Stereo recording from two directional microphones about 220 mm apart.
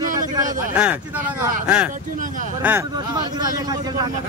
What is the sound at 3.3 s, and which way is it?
Speech, 15° right (ahead or behind).